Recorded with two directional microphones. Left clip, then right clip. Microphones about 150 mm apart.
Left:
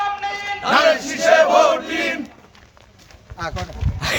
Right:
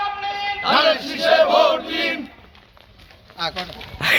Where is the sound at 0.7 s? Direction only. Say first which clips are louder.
Left 2 dB; 20° left (ahead or behind).